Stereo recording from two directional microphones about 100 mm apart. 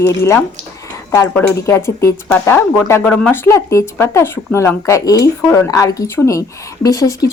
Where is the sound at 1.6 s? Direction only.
30° left (ahead or behind).